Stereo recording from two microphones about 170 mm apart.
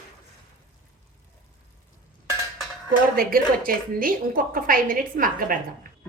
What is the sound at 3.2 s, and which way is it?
A woman's voice, 55° right (ahead or behind).